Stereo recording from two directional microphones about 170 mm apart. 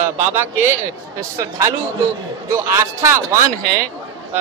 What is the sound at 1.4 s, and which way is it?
A man's voice, 20° right (ahead or behind).